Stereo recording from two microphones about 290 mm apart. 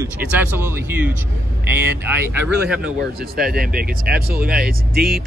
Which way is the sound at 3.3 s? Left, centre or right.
Right.